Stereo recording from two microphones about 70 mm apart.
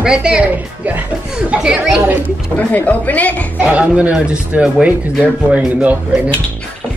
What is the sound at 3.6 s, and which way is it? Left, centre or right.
Speech, centre.